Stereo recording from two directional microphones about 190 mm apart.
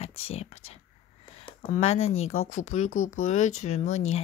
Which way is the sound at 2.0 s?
90° left.